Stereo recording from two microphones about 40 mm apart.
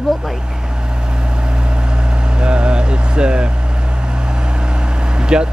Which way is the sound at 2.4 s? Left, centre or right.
Right.